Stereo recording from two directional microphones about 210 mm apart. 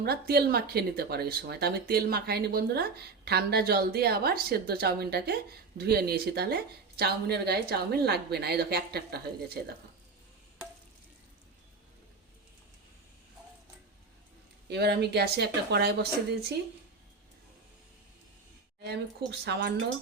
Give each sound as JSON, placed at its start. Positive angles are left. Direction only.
{"t": 0.0, "sound": "speech", "side_deg": -50}
{"t": 14.7, "sound": "speech", "side_deg": -50}
{"t": 18.8, "sound": "speech", "side_deg": -50}